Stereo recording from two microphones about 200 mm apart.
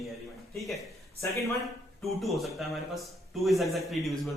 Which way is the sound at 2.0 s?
Centre (ahead or behind).